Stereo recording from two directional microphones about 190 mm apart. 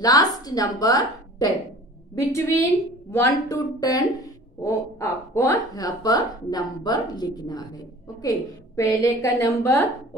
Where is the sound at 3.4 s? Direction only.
20° left (ahead or behind).